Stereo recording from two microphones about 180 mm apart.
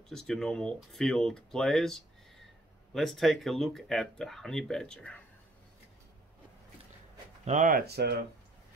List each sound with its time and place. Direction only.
0.1 s speech: centre (ahead or behind)
7.4 s speech: 45° right (ahead or behind); by 8.3 s 65° right (ahead or behind)